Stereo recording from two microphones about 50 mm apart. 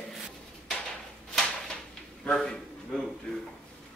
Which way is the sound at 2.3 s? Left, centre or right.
Centre.